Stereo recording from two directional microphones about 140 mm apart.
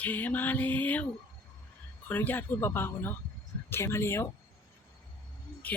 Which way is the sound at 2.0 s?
15° left (ahead or behind).